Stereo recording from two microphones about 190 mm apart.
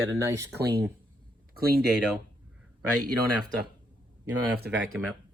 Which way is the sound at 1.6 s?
55° right (ahead or behind).